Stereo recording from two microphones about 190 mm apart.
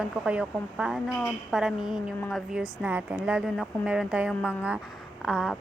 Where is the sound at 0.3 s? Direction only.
5° right (ahead or behind).